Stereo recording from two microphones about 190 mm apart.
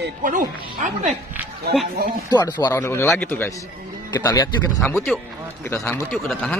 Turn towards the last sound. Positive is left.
turn(degrees=0)  # may be behind; listen again after turning